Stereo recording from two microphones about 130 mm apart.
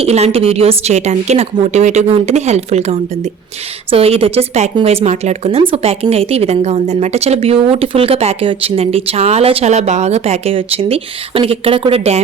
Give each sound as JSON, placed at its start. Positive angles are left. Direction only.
{"t": 0.0, "sound": "a woman's voice", "side_deg": -55}